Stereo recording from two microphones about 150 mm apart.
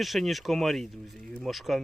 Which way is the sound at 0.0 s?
Centre (ahead or behind).